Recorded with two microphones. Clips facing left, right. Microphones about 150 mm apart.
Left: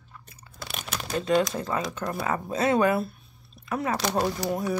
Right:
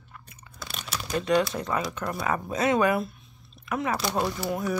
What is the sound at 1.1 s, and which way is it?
Speech, 25° left (ahead or behind).